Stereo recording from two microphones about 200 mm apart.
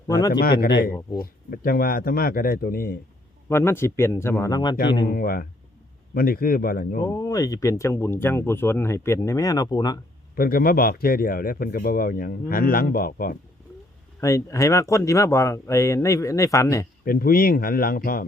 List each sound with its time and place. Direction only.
0.1 s speech: 20° left (ahead or behind)
1.2 s speech: 45° left (ahead or behind)
3.5 s speech: 10° left (ahead or behind)
5.0 s speech: 45° left (ahead or behind)
7.1 s speech: 15° left (ahead or behind)
10.3 s speech: 45° left (ahead or behind)
14.2 s speech: 15° left (ahead or behind)
17.1 s speech: 45° left (ahead or behind)